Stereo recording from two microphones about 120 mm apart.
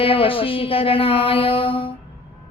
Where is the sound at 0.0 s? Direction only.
50° left (ahead or behind).